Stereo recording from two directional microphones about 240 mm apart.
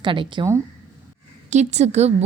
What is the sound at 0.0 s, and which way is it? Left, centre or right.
Speech, centre.